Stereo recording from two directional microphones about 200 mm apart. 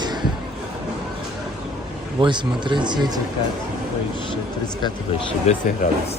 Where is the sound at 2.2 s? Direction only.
25° right (ahead or behind).